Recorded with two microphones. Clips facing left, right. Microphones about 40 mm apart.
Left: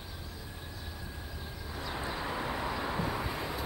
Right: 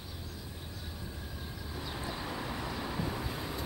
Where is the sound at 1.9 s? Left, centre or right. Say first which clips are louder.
Left 4 dB; left.